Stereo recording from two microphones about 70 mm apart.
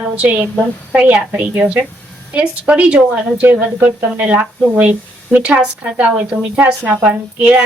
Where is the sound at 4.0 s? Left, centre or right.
Centre.